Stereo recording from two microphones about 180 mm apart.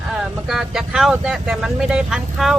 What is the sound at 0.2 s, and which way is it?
Speech, centre (ahead or behind).